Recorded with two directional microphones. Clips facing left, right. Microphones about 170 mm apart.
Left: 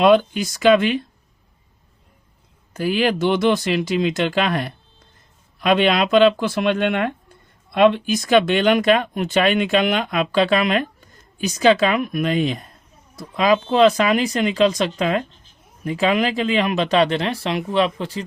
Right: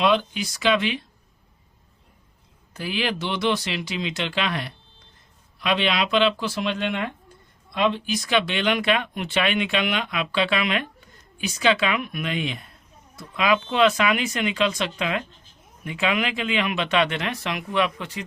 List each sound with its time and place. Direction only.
0.0 s speech: 50° left (ahead or behind)
2.7 s speech: 45° left (ahead or behind); by 18.2 s 30° left (ahead or behind)